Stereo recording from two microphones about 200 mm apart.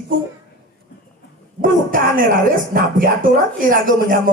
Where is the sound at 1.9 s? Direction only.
45° right (ahead or behind).